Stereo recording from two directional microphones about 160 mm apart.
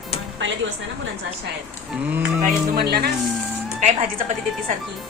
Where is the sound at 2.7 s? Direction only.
75° right (ahead or behind).